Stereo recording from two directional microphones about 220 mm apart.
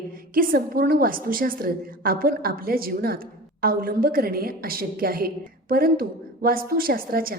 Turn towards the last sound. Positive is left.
turn(degrees=-40)  # may be behind; listen again after turning